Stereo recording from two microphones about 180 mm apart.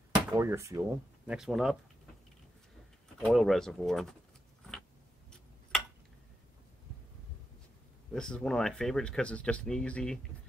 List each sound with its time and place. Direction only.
0.3 s speech: 15° right (ahead or behind)
1.3 s speech: 5° right (ahead or behind)
3.2 s speech: centre (ahead or behind)
8.1 s speech: 5° left (ahead or behind)